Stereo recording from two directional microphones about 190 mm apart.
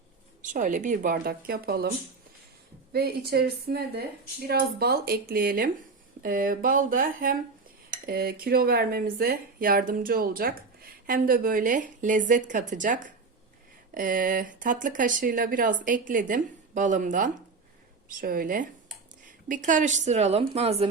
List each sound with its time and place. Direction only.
0.4 s speech: 40° right (ahead or behind)
2.9 s a woman's voice: 55° right (ahead or behind); by 20.9 s 30° right (ahead or behind)